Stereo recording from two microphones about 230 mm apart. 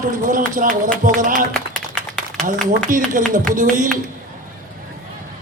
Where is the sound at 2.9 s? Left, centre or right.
Right.